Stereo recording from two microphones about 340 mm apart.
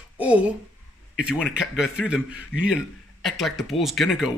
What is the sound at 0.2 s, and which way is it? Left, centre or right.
A woman's voice, centre.